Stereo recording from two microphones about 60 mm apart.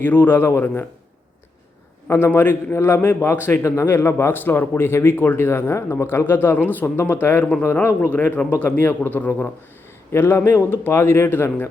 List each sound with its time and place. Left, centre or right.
0.0 s a man's voice: left
2.0 s a man's voice: left
2.3 s a man's voice: left
2.7 s a man's voice: left
3.6 s a man's voice: left
3.8 s a man's voice: left
8.0 s a man's voice: left
10.1 s a man's voice: left